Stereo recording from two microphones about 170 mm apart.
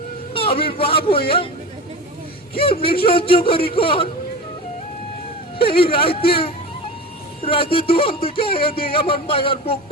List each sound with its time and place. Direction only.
0.3 s speech: 35° left (ahead or behind)
2.6 s speech: 30° left (ahead or behind)
5.5 s speech: 30° left (ahead or behind)